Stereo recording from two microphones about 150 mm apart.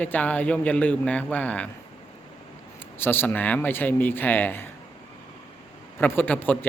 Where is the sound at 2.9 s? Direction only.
15° left (ahead or behind).